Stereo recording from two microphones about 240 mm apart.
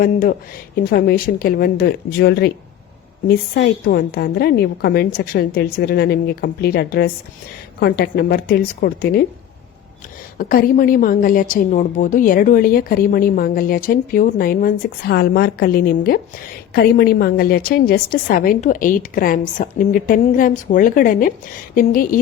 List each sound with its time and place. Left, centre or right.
0.0 s a woman's voice: left
10.3 s a woman's voice: left